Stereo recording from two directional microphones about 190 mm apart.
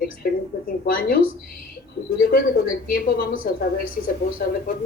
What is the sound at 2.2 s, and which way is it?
A woman's voice, 50° left (ahead or behind).